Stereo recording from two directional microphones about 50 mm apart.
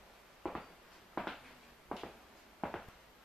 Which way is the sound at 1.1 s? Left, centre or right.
Centre.